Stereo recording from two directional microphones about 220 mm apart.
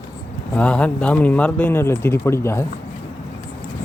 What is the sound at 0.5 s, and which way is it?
Speech, 5° left (ahead or behind).